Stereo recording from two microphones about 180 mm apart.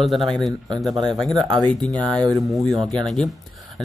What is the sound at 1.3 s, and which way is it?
Speech, 25° right (ahead or behind).